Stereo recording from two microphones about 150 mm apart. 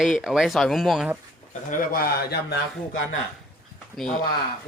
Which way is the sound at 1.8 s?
80° left.